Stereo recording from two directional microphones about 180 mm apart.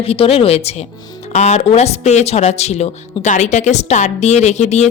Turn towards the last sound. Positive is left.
turn(degrees=40)  # may be behind; listen again after turning